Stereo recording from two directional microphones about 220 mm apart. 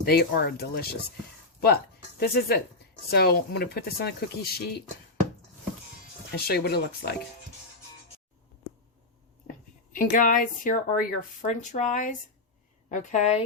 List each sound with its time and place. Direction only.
0.0 s speech: 45° left (ahead or behind)
6.3 s speech: 45° left (ahead or behind)
9.9 s speech: 40° left (ahead or behind)